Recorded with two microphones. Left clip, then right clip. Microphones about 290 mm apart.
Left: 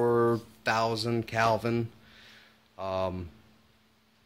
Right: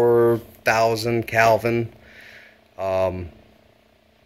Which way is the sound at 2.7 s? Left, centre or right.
Left.